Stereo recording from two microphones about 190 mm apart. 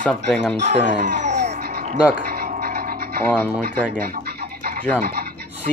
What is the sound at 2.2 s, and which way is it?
Television, 55° right (ahead or behind).